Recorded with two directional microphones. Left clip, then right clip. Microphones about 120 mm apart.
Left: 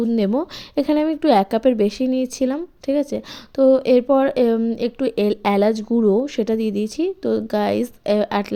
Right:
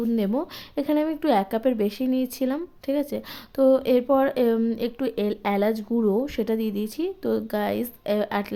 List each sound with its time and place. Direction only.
0.2 s speech: 35° left (ahead or behind)
1.0 s a woman's voice: 25° left (ahead or behind)
7.6 s speech: 35° left (ahead or behind)